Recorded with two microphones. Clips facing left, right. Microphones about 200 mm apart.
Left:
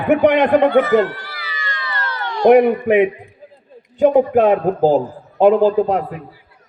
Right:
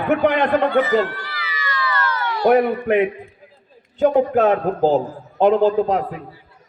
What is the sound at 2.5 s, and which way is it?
A man's voice, 15° left (ahead or behind).